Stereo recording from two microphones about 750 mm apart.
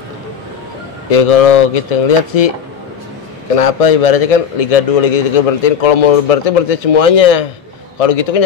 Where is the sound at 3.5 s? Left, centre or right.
Left.